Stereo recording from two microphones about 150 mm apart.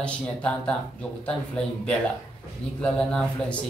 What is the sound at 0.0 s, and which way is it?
Speech, 5° left (ahead or behind).